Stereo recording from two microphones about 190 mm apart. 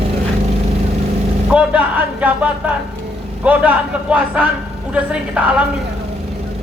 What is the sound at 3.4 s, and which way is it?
A man's voice, 10° right (ahead or behind).